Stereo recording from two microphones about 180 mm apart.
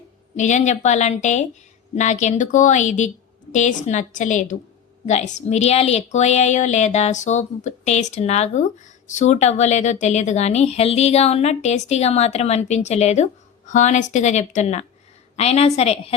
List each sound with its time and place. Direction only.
0.3 s a woman's voice: 40° left (ahead or behind)